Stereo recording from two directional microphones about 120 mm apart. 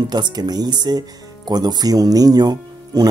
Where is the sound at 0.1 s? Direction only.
35° right (ahead or behind).